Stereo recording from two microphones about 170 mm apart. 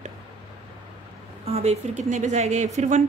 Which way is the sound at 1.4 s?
40° right (ahead or behind).